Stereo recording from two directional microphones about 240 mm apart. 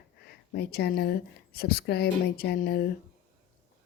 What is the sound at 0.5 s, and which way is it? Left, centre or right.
Speech, left.